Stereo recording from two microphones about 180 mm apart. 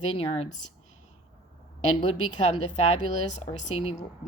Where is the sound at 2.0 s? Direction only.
40° left (ahead or behind).